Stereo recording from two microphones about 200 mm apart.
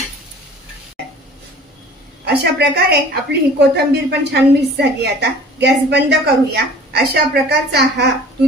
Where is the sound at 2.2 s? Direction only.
55° right (ahead or behind).